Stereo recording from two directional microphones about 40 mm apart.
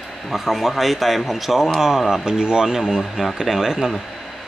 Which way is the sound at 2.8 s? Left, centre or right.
Centre.